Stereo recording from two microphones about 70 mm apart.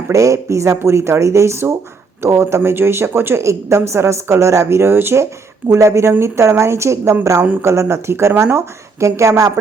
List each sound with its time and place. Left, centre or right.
0.1 s a woman's voice: right